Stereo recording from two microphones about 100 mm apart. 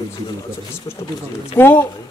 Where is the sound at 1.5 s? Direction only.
20° left (ahead or behind).